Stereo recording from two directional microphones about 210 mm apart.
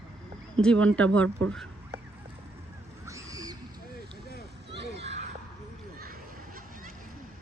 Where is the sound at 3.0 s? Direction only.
15° right (ahead or behind).